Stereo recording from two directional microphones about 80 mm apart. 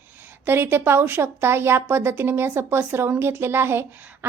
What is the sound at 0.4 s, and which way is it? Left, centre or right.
A woman's voice, right.